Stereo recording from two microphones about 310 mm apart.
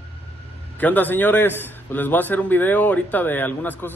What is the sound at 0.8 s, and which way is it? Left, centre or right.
Speech, centre.